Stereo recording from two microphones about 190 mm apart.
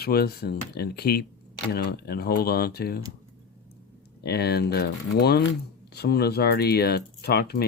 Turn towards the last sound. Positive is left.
turn(degrees=55)  # may be behind; listen again after turning